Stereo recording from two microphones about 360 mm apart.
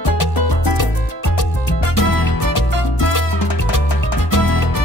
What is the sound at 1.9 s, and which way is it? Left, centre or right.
Music, left.